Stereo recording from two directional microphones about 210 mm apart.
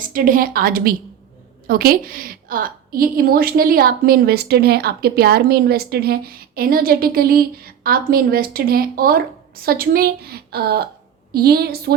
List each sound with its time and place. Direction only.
0.0 s a woman's voice: 40° right (ahead or behind)